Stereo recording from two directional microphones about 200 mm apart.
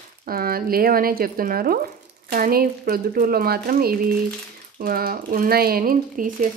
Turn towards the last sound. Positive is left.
turn(degrees=-45)  # may be behind; listen again after turning